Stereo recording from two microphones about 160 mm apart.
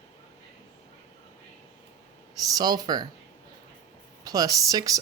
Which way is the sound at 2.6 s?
25° right (ahead or behind).